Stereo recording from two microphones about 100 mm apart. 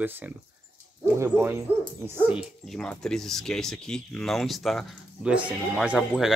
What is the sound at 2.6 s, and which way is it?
Speech, 5° left (ahead or behind).